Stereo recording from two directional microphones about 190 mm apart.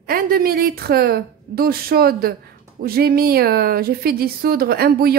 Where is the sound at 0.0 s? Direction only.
50° right (ahead or behind).